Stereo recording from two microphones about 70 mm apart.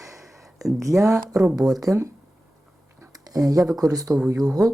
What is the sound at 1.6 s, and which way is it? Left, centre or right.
Speech, right.